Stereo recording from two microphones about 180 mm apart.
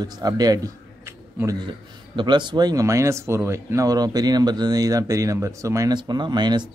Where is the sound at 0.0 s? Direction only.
20° right (ahead or behind).